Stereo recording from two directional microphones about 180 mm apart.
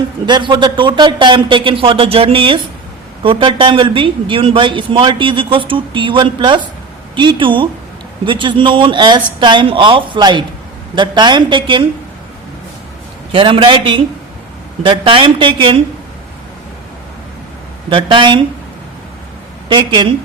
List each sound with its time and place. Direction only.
0.3 s speech: 25° right (ahead or behind)
13.3 s speech: 30° right (ahead or behind)
17.8 s speech: 25° right (ahead or behind)
19.6 s speech: 25° right (ahead or behind)